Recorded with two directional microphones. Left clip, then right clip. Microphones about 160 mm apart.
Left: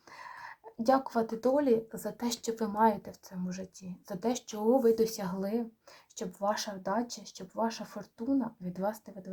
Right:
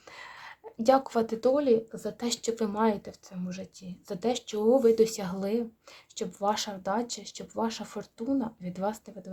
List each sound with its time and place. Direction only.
0.1 s a sound: 50° right (ahead or behind)
0.8 s speech: 50° right (ahead or behind)
1.4 s speech: 30° right (ahead or behind)